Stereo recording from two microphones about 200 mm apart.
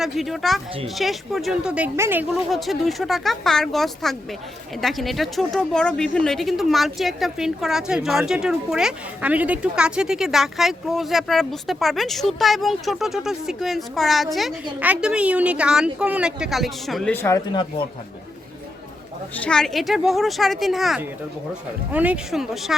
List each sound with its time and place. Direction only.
0.0 s a woman's voice: centre (ahead or behind)
2.5 s a woman's voice: centre (ahead or behind)
17.2 s speech: 20° left (ahead or behind)
19.5 s a woman's voice: centre (ahead or behind)